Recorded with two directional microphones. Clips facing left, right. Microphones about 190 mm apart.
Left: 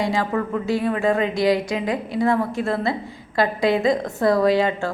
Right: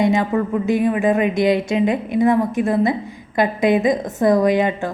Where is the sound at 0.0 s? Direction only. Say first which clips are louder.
Right 5 dB; 20° right (ahead or behind).